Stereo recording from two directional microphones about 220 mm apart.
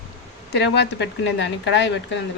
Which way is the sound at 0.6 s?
50° left (ahead or behind).